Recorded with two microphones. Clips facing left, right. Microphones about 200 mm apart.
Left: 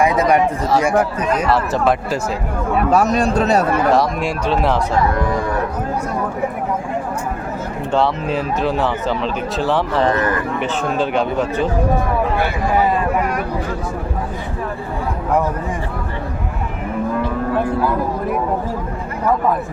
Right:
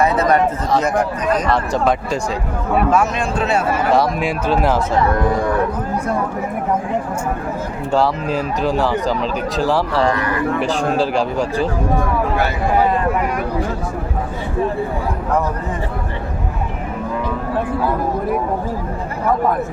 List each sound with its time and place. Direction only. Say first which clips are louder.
0.0 s speech: even; 10° left (ahead or behind)
2.9 s speech: left 3 dB; 35° left (ahead or behind)
3.9 s speech: even; centre (ahead or behind)
7.9 s speech: right 1 dB; centre (ahead or behind)
10.8 s a man's voice: right 1 dB; 30° right (ahead or behind)
11.1 s speech: even; centre (ahead or behind)